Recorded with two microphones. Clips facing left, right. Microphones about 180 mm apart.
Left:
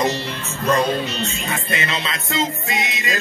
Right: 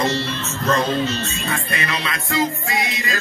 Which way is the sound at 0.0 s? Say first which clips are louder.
Even; 15° left (ahead or behind).